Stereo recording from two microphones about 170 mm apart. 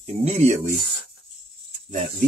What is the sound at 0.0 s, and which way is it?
Speech, 40° right (ahead or behind).